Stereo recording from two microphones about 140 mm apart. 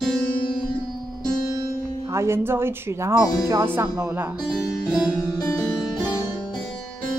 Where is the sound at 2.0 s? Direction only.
20° right (ahead or behind).